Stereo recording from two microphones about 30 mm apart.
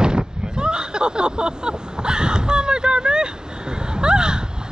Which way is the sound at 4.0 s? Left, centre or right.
Right.